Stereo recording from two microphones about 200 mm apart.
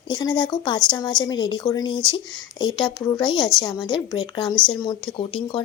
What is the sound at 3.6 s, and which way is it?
A woman's voice, 25° left (ahead or behind).